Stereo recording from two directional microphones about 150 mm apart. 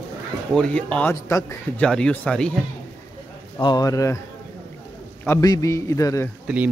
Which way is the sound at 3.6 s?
25° left (ahead or behind).